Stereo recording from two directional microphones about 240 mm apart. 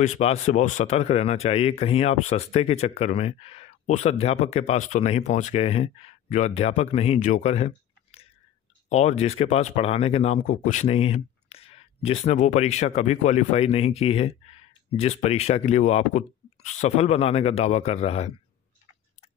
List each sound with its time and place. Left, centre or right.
0.0 s speech: left